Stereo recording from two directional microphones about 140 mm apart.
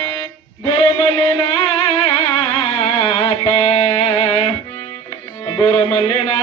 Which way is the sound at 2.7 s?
45° left (ahead or behind).